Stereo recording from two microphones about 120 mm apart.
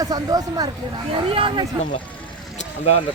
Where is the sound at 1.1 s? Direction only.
50° right (ahead or behind).